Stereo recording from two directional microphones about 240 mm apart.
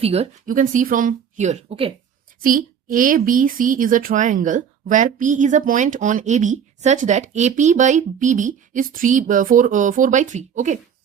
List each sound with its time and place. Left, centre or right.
0.0 s a woman's voice: right